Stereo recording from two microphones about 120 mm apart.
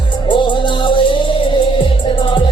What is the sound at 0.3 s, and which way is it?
Music, 40° left (ahead or behind).